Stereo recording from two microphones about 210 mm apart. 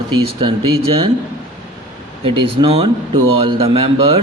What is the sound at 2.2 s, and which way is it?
Speech, 25° right (ahead or behind).